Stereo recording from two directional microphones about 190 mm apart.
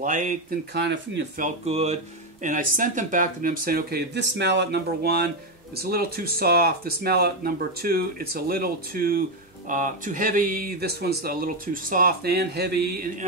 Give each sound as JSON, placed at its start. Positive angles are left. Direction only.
{"t": 0.0, "sound": "speech", "side_deg": -45}
{"t": 0.7, "sound": "speech", "side_deg": -65}
{"t": 1.4, "sound": "speech", "side_deg": -35}
{"t": 2.4, "sound": "speech", "side_deg": -45}